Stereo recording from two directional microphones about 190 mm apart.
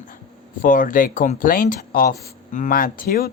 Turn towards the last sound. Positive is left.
turn(degrees=50)  # may be behind; listen again after turning